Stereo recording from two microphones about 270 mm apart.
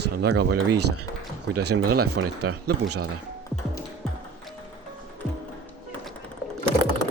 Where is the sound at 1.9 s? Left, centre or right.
Right.